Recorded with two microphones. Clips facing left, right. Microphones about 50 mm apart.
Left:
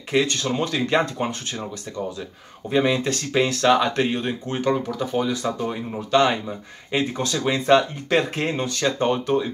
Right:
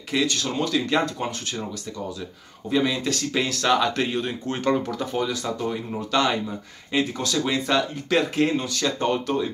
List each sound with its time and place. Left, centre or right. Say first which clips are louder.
0.1 s speech: left 3 dB; left
2.7 s speech: left 2 dB; left
3.6 s speech: left 2 dB; centre
3.9 s speech: left 2 dB; left
4.5 s speech: even; centre